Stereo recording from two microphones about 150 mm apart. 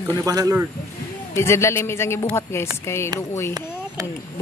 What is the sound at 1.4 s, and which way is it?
Speech, 20° left (ahead or behind).